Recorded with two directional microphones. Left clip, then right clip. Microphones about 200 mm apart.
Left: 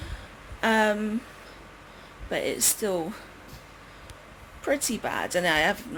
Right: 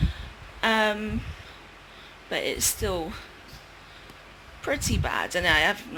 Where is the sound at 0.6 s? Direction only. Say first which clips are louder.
Even; 15° left (ahead or behind).